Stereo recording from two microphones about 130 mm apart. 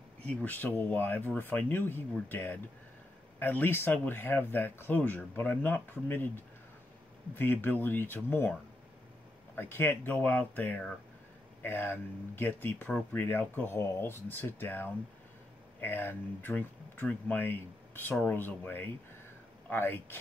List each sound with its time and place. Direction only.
0.3 s speech: 10° left (ahead or behind)
9.6 s speech: 15° left (ahead or behind)